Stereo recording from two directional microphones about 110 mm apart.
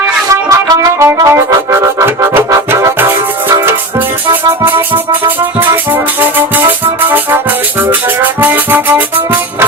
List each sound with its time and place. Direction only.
0.4 s music: 35° right (ahead or behind)
1.0 s brass instrument: 25° right (ahead or behind)
2.6 s music: 25° right (ahead or behind)
5.5 s music: 20° right (ahead or behind)